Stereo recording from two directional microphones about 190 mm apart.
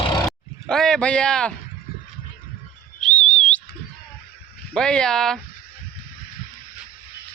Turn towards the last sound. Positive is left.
turn(degrees=5)  # may be behind; listen again after turning